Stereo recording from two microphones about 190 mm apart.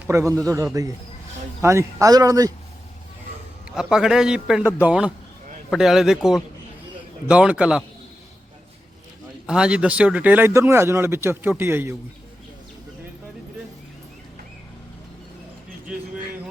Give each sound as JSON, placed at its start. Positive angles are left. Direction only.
{"t": 0.1, "sound": "speech", "side_deg": -15}
{"t": 3.7, "sound": "a man's voice", "side_deg": -5}
{"t": 9.5, "sound": "speech", "side_deg": -5}